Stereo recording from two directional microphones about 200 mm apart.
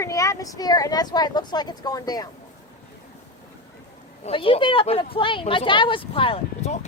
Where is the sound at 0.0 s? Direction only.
15° left (ahead or behind).